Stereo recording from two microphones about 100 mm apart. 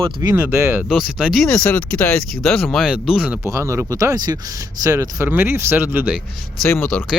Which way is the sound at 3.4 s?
30° right (ahead or behind).